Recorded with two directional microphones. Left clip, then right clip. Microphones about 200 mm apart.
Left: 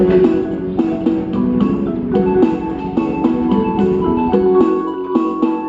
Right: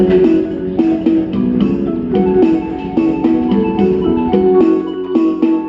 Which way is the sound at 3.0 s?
30° right (ahead or behind).